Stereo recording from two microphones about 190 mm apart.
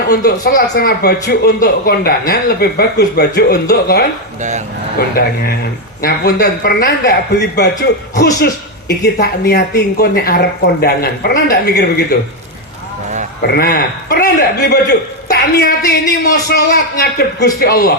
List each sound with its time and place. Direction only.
0.1 s a man's voice: 55° left (ahead or behind)
4.4 s speech: 40° right (ahead or behind)
4.9 s a man's voice: 55° left (ahead or behind)
13.5 s a man's voice: 55° left (ahead or behind)